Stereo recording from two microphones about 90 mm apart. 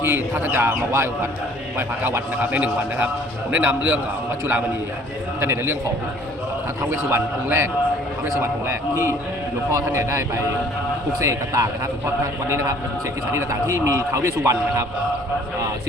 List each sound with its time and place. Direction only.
0.0 s a man's voice: 25° right (ahead or behind)
5.4 s a man's voice: 25° right (ahead or behind)
6.9 s a man's voice: 30° right (ahead or behind)